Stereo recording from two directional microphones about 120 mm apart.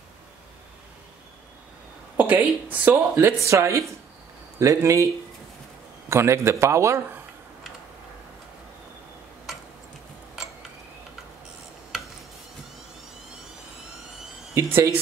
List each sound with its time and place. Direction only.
2.1 s a man's voice: 15° right (ahead or behind)
14.5 s a man's voice: 20° right (ahead or behind)